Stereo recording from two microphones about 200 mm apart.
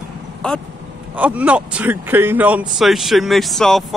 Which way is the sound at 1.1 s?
5° right (ahead or behind).